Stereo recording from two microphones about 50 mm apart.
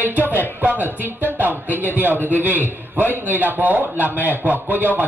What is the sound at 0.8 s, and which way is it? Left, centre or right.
A man's voice, right.